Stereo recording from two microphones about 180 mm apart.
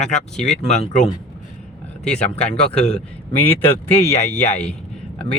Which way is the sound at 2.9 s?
10° left (ahead or behind).